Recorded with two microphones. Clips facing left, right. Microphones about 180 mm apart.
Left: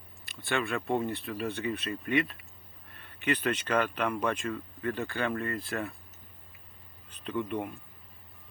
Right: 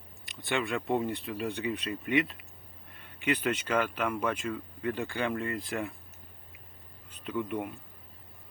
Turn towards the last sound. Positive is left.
turn(degrees=-10)  # may be behind; listen again after turning